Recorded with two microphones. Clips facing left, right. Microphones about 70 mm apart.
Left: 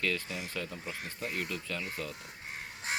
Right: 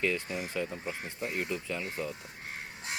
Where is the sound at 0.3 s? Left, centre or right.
Right.